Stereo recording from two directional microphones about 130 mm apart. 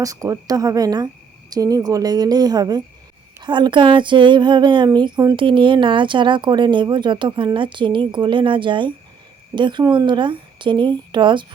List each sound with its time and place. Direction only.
0.0 s a woman's voice: 25° right (ahead or behind)